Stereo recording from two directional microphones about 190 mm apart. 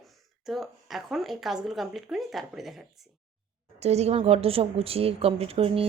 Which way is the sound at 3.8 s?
35° right (ahead or behind).